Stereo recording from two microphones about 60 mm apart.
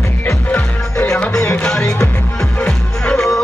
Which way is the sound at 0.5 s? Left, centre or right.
Centre.